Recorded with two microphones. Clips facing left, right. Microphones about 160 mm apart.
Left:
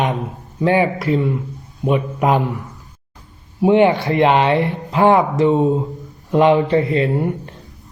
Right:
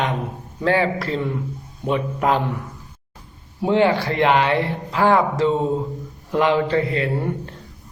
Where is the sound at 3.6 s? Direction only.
20° left (ahead or behind).